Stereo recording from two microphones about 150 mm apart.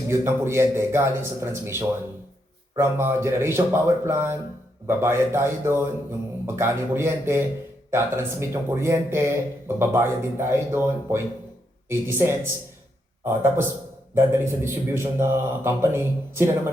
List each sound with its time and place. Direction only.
0.1 s speech: 15° right (ahead or behind)